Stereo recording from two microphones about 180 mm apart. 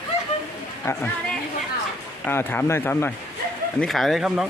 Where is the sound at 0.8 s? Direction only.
15° left (ahead or behind).